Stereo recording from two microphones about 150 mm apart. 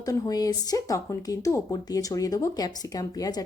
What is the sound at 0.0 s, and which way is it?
A woman's voice, 25° left (ahead or behind).